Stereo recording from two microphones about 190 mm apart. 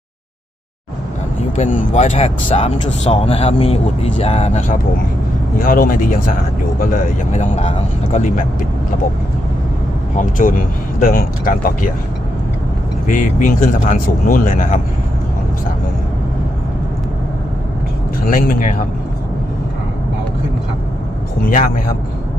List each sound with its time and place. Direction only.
1.5 s speech: 40° left (ahead or behind)
10.2 s speech: 45° left (ahead or behind)
13.1 s speech: 45° left (ahead or behind)
18.3 s speech: 45° left (ahead or behind)
21.5 s speech: 45° left (ahead or behind)